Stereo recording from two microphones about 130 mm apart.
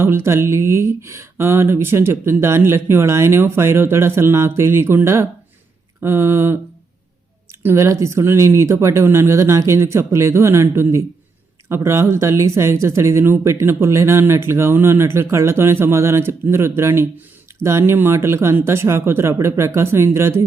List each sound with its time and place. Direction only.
0.0 s speech: 20° right (ahead or behind)
7.6 s speech: 20° right (ahead or behind)